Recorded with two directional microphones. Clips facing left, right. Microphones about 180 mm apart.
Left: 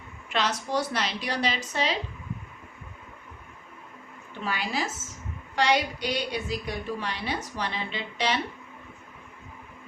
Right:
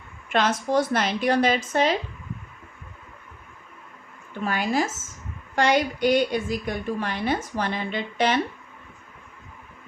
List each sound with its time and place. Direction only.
0.3 s a woman's voice: 50° right (ahead or behind)
4.4 s a woman's voice: 50° right (ahead or behind)